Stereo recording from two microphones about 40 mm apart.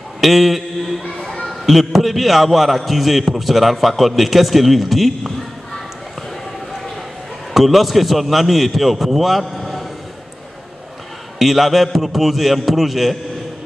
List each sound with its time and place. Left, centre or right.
0.2 s a man's voice: centre
1.2 s a sound: left
1.5 s a man's voice: centre
7.5 s a man's voice: centre
11.3 s a man's voice: centre